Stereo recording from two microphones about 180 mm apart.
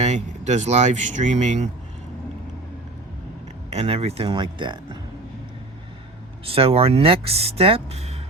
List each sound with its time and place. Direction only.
0.0 s speech: 40° right (ahead or behind)
3.7 s speech: 35° right (ahead or behind)
6.4 s speech: 30° right (ahead or behind)